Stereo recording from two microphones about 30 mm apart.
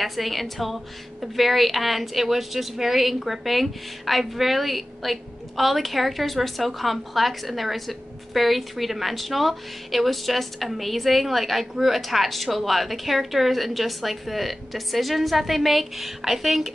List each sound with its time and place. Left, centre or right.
0.0 s a woman's voice: centre